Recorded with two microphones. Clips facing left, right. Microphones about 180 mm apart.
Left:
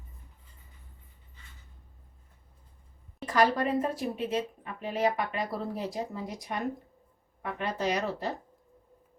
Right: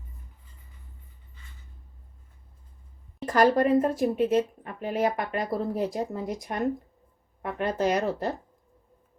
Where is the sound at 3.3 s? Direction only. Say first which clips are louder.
Right 5 dB; 50° right (ahead or behind).